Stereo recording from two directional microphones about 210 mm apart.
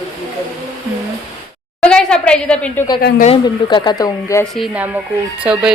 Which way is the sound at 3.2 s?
25° left (ahead or behind).